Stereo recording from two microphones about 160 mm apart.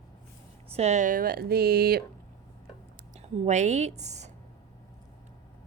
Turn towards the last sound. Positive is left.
turn(degrees=-45)  # may be behind; listen again after turning